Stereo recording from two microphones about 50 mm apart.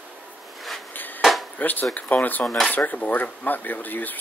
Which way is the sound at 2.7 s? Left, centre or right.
Left.